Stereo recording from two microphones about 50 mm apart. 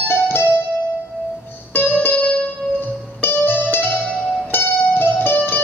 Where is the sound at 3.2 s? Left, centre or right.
Left.